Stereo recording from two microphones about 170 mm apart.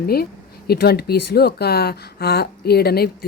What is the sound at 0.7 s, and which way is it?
A woman's voice, 70° left (ahead or behind).